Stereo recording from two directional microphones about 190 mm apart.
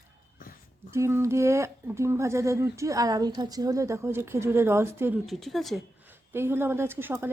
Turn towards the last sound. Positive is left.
turn(degrees=-10)  # may be behind; listen again after turning